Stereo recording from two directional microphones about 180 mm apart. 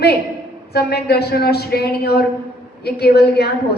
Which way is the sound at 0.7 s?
60° left (ahead or behind).